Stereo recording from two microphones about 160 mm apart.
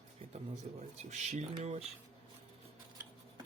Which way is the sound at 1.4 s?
45° right (ahead or behind).